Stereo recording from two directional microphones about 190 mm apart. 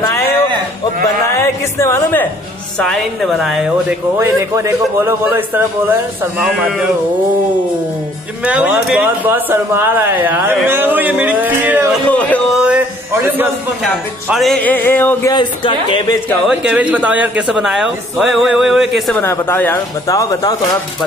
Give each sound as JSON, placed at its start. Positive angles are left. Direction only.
{"t": 1.4, "sound": "speech", "side_deg": 15}
{"t": 2.8, "sound": "speech", "side_deg": 0}
{"t": 4.2, "sound": "a man's voice", "side_deg": -15}
{"t": 8.5, "sound": "a man's voice", "side_deg": -5}
{"t": 12.1, "sound": "speech", "side_deg": 10}
{"t": 12.6, "sound": "a sound", "side_deg": -10}
{"t": 14.3, "sound": "speech", "side_deg": 0}
{"t": 15.3, "sound": "speech", "side_deg": 25}
{"t": 16.4, "sound": "speech", "side_deg": -5}
{"t": 19.2, "sound": "speech", "side_deg": 10}